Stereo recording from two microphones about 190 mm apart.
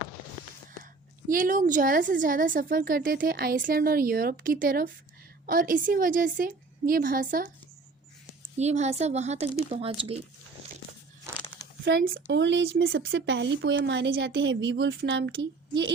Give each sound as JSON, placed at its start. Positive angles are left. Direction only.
{"t": 1.3, "sound": "speech", "side_deg": -45}
{"t": 8.5, "sound": "speech", "side_deg": -35}
{"t": 11.9, "sound": "speech", "side_deg": -55}